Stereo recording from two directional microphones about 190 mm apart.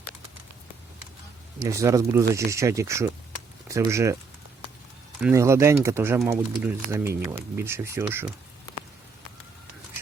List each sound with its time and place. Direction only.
1.6 s speech: 15° right (ahead or behind)
5.2 s speech: 15° right (ahead or behind)